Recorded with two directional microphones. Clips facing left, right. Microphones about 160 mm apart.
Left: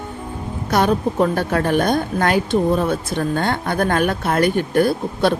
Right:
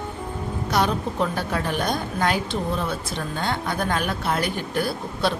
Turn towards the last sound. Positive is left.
turn(degrees=55)  # may be behind; listen again after turning